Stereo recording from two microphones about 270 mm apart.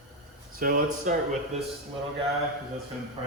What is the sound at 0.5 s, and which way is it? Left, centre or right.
Speech, right.